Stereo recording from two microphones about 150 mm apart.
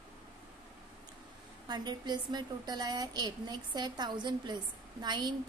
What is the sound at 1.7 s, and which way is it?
A woman's voice, 30° right (ahead or behind).